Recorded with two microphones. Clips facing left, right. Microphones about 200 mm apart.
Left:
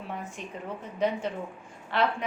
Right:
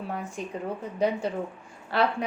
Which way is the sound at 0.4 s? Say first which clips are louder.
Right 5 dB; 35° right (ahead or behind).